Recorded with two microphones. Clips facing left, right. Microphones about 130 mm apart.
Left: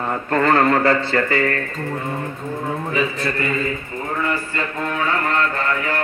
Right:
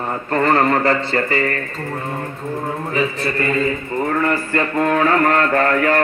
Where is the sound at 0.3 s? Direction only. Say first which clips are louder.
Even; 20° right (ahead or behind).